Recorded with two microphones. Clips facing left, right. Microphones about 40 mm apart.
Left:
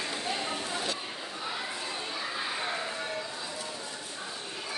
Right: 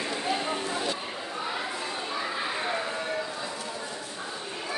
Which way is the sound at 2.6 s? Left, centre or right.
Centre.